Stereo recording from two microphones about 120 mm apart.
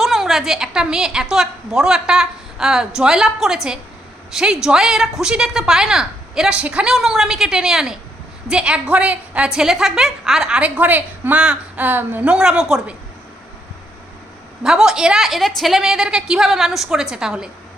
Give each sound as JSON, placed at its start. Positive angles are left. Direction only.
{"t": 0.0, "sound": "a woman's voice", "side_deg": 0}
{"t": 14.6, "sound": "a woman's voice", "side_deg": -5}